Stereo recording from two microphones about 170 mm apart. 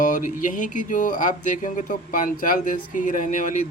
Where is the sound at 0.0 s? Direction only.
50° left (ahead or behind).